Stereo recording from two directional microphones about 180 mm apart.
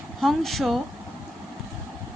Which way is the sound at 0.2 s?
Centre (ahead or behind).